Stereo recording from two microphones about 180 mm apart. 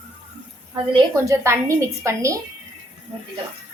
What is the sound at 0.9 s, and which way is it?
A woman's voice, 15° right (ahead or behind).